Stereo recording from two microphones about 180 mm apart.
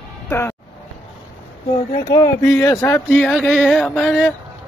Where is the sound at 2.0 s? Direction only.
20° left (ahead or behind).